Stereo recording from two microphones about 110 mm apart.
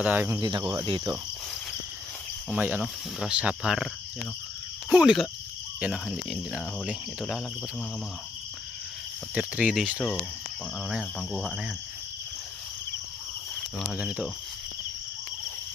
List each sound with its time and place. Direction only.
0.0 s speech: 15° right (ahead or behind)
0.4 s cricket: 40° right (ahead or behind)
2.5 s speech: 15° right (ahead or behind); by 7.4 s centre (ahead or behind)
9.3 s speech: 10° right (ahead or behind)
13.9 s speech: 5° right (ahead or behind)